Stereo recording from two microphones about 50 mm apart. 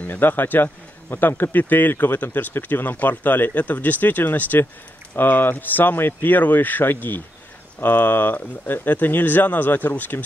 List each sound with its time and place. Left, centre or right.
0.0 s speech: left